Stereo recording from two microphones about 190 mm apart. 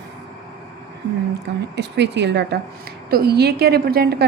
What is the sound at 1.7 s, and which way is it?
A woman's voice, 65° right (ahead or behind).